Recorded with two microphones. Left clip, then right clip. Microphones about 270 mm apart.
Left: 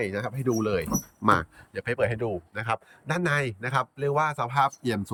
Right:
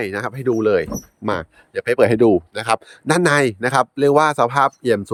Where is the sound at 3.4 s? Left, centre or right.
Centre.